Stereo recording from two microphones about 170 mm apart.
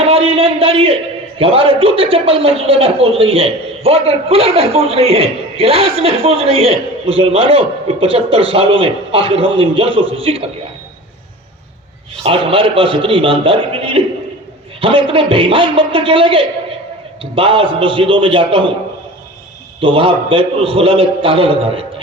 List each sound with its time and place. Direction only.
0.0 s a sound: 35° right (ahead or behind)
1.4 s a man's voice: 35° right (ahead or behind)
12.2 s a man's voice: 35° right (ahead or behind)
19.8 s a man's voice: 30° right (ahead or behind)